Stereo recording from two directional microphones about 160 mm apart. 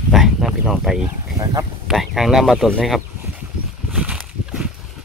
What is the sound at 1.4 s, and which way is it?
Speech, 25° right (ahead or behind).